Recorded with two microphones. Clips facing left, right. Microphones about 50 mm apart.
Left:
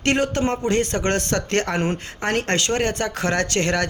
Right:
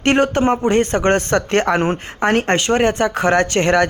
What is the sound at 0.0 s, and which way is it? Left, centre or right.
A man's voice, right.